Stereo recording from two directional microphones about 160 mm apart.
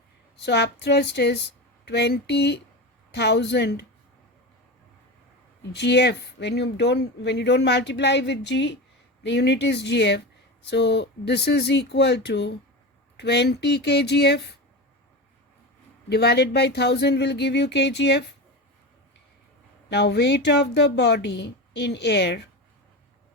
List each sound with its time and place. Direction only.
0.3 s speech: 90° left
5.7 s speech: 90° left
16.0 s speech: 90° left
19.9 s speech: 90° left